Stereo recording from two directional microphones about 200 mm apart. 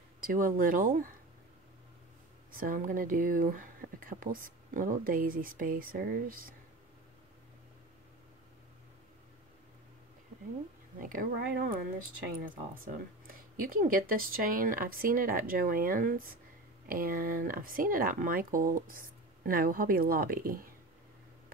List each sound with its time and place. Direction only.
0.2 s speech: 45° right (ahead or behind)
2.5 s speech: 45° right (ahead or behind)
11.0 s speech: 45° right (ahead or behind)
12.8 s speech: 45° right (ahead or behind)